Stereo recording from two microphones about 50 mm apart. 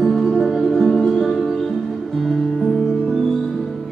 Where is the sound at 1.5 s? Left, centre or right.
Centre.